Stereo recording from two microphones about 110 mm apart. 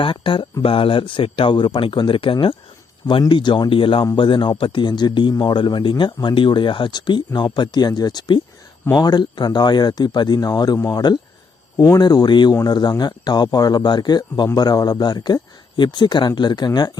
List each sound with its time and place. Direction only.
0.0 s a man's voice: 50° left (ahead or behind)